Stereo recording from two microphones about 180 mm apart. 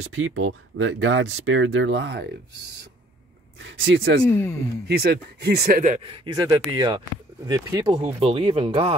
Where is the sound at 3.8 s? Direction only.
90° right.